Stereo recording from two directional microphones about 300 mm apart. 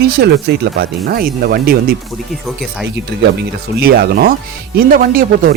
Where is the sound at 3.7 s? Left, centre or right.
Right.